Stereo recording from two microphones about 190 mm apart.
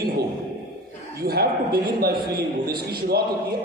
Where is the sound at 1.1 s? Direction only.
55° right (ahead or behind).